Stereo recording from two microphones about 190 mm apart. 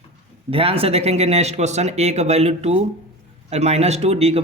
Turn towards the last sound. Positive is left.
turn(degrees=-30)  # may be behind; listen again after turning